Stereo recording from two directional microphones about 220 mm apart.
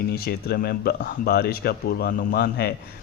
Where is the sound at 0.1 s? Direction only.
45° left (ahead or behind).